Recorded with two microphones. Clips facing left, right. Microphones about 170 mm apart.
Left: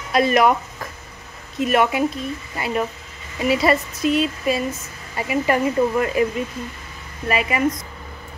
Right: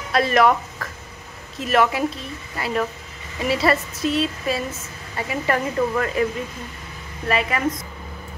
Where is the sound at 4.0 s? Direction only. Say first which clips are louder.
Left 3 dB; 30° right (ahead or behind).